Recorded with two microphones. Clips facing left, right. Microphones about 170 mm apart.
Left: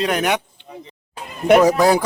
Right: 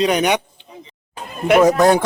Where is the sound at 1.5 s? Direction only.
Centre (ahead or behind).